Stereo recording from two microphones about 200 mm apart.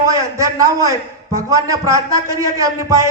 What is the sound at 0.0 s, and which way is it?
A man's voice, 15° right (ahead or behind).